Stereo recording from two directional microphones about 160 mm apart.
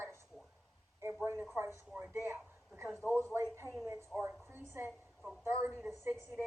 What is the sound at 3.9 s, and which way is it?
Speech, 15° right (ahead or behind).